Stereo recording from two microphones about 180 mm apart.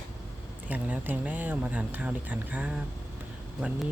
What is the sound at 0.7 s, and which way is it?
Speech, 10° right (ahead or behind).